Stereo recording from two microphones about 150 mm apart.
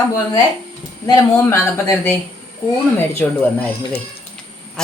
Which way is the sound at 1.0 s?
20° left (ahead or behind).